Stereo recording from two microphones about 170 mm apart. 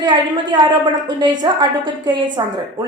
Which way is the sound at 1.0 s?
25° right (ahead or behind).